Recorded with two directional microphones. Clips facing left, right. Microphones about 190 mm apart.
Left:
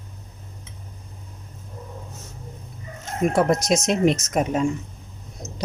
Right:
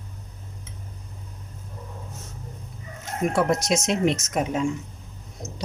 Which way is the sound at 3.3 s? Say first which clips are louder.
Left 2 dB; 40° left (ahead or behind).